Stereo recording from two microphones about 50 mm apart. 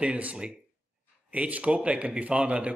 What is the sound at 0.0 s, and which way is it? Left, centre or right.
Speech, right.